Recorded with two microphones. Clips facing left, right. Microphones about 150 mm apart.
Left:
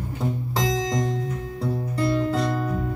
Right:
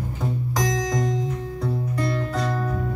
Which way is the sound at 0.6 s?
25° left (ahead or behind).